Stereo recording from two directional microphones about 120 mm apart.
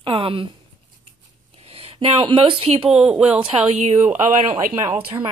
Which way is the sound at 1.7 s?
50° right (ahead or behind).